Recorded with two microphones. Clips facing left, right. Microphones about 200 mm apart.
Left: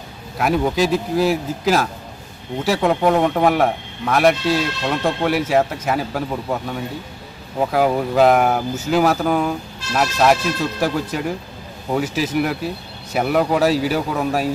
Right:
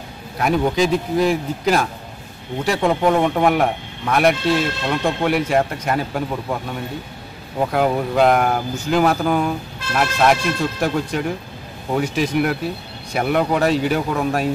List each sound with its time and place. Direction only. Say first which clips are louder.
0.4 s speech: even; centre (ahead or behind)
7.7 s speech: left 1 dB; centre (ahead or behind)